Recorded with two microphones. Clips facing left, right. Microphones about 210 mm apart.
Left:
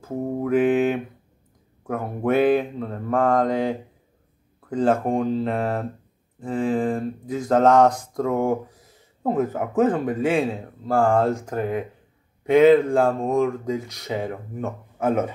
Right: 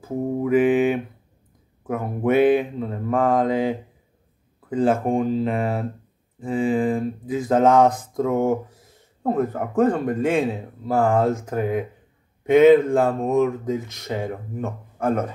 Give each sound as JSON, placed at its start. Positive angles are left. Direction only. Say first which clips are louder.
{"t": 0.0, "sound": "mantra", "louder": "right 2 dB", "side_deg": -5}
{"t": 1.9, "sound": "speech", "louder": "right 1 dB", "side_deg": -5}